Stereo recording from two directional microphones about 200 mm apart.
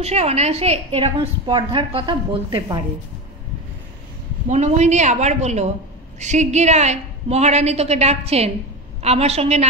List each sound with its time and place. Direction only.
0.0 s a woman's voice: 30° right (ahead or behind)
4.5 s a woman's voice: 35° right (ahead or behind)